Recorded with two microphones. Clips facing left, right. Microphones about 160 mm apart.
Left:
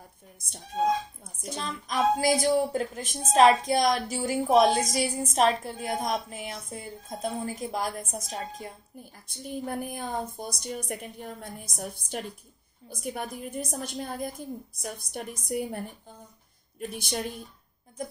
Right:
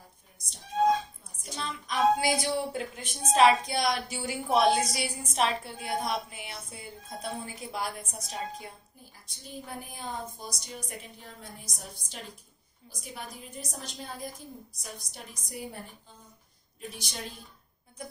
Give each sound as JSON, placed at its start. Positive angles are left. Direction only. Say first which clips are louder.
{"t": 1.2, "sound": "a woman's voice", "louder": "left 3 dB", "side_deg": 45}
{"t": 9.3, "sound": "a woman's voice", "louder": "left 8 dB", "side_deg": 55}
{"t": 16.9, "sound": "a woman's voice", "louder": "left 10 dB", "side_deg": 55}